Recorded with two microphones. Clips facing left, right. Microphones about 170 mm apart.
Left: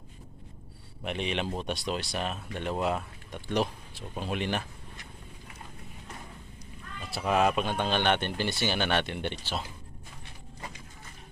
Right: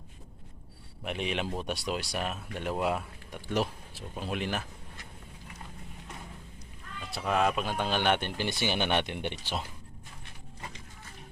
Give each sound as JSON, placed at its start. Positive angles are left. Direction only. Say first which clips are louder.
{"t": 1.0, "sound": "speech", "louder": "left 1 dB", "side_deg": -5}
{"t": 7.1, "sound": "speech", "louder": "left 2 dB", "side_deg": 5}